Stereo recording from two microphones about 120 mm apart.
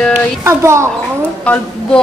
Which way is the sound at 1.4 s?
10° left (ahead or behind).